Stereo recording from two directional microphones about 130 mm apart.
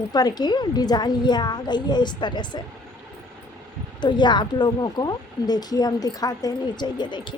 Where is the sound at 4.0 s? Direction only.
35° left (ahead or behind).